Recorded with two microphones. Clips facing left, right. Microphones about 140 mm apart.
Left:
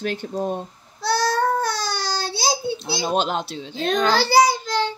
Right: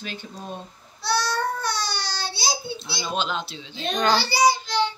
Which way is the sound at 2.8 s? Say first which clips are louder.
Left 5 dB; 55° left (ahead or behind).